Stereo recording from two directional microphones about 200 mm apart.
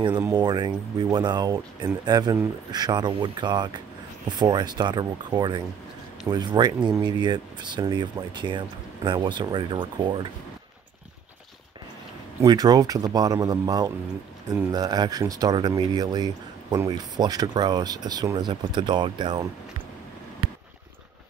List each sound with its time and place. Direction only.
0.0 s speech: 20° right (ahead or behind)
12.4 s speech: 20° right (ahead or behind)